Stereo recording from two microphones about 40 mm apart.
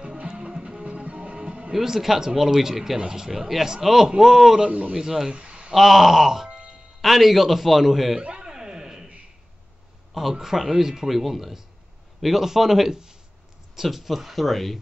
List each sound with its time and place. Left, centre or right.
0.3 s music: right
1.7 s speech: centre
4.6 s speech: right
4.9 s speech: centre
5.3 s a sound: right
5.7 s a man's voice: centre
8.2 s a sound: right
10.4 s a man's voice: centre